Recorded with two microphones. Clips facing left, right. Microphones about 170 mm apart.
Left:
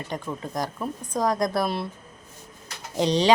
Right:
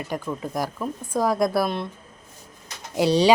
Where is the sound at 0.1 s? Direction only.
5° right (ahead or behind).